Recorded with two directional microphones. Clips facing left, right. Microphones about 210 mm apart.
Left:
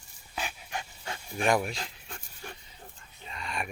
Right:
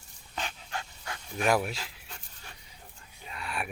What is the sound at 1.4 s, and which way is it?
Speech, 5° right (ahead or behind).